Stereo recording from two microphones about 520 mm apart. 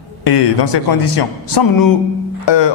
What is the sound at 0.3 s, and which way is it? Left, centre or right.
A man's voice, left.